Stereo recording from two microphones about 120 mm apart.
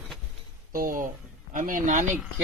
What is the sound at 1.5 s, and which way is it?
Speech, 90° right.